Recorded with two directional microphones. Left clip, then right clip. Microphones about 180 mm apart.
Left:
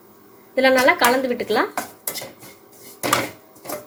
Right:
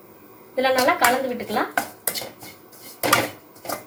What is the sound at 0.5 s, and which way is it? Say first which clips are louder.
Speech: left 4 dB; 45° left (ahead or behind).